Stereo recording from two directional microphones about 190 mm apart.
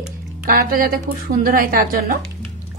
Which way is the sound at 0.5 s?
50° right (ahead or behind).